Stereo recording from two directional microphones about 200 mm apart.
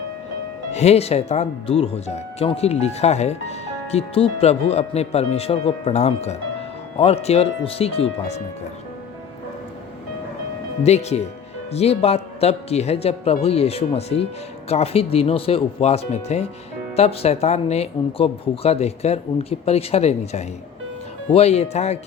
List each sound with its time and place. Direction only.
0.7 s speech: 35° left (ahead or behind)
10.8 s speech: 35° left (ahead or behind)